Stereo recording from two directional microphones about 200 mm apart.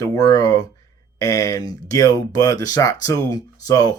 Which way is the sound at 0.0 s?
15° left (ahead or behind).